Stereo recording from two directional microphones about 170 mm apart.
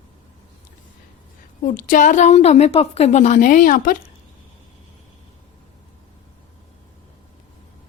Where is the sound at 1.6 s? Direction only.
55° left (ahead or behind).